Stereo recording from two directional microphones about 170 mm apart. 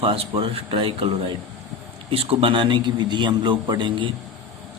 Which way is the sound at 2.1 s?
35° right (ahead or behind).